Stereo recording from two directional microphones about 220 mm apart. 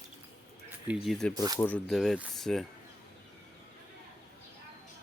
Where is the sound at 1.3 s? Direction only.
15° right (ahead or behind).